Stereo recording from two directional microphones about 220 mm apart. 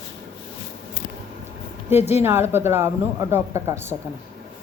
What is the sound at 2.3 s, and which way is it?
Speech, 10° right (ahead or behind).